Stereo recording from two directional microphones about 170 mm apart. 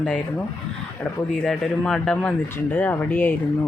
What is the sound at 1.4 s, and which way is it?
Speech, 5° left (ahead or behind).